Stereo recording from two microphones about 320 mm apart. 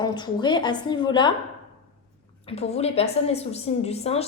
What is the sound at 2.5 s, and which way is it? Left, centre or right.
A woman's voice, centre.